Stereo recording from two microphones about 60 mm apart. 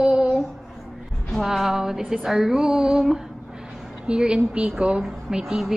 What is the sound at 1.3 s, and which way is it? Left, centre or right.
Female singing, centre.